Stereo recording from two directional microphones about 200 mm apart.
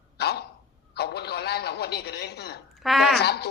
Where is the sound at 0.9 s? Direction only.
55° left (ahead or behind).